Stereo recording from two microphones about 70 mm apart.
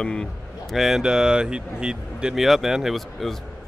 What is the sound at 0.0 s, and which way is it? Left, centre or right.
Speech, centre.